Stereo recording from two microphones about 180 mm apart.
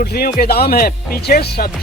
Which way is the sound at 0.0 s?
60° left (ahead or behind).